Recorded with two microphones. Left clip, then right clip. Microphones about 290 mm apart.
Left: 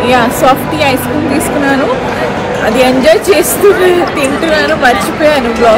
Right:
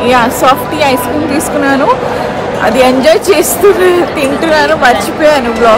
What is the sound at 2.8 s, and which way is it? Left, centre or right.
A woman's voice, centre.